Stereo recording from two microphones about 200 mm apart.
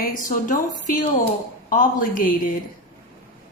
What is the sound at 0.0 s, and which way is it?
Speech, 45° left (ahead or behind).